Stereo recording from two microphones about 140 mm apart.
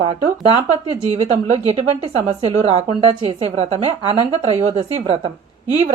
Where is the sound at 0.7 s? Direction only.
50° right (ahead or behind).